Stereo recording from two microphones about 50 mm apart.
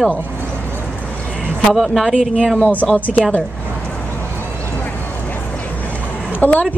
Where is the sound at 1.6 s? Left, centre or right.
Centre.